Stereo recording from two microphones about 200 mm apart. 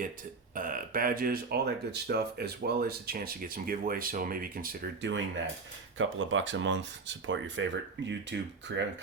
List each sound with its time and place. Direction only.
0.5 s speech: 45° right (ahead or behind)
6.0 s speech: 75° right (ahead or behind)